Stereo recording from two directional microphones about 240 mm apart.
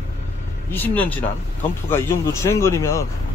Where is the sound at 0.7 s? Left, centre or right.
Centre.